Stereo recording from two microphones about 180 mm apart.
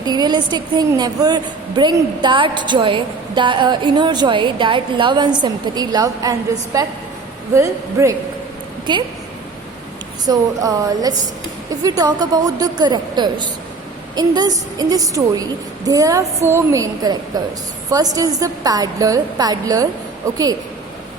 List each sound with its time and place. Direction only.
0.0 s a woman's voice: 20° right (ahead or behind)
10.2 s a woman's voice: 20° right (ahead or behind)